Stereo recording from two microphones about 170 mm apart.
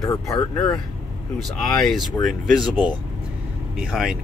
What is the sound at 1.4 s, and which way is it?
Speech, centre (ahead or behind).